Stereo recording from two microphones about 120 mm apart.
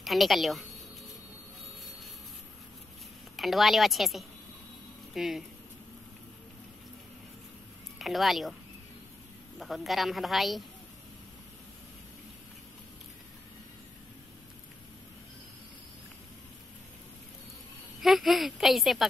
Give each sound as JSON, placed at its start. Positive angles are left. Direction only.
{"t": 0.0, "sound": "a woman's voice", "side_deg": 0}
{"t": 3.3, "sound": "a woman's voice", "side_deg": 0}
{"t": 8.0, "sound": "a woman's voice", "side_deg": 0}
{"t": 9.6, "sound": "a woman's voice", "side_deg": 0}
{"t": 18.0, "sound": "a woman's voice", "side_deg": 0}